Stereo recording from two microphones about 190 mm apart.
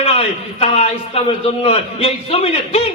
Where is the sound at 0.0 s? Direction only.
30° left (ahead or behind).